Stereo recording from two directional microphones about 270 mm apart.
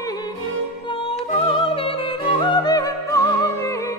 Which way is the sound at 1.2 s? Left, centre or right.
Centre.